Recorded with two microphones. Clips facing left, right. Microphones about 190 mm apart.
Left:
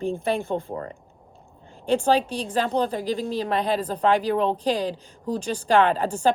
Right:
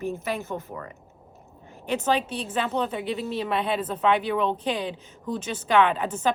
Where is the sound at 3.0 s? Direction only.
5° right (ahead or behind).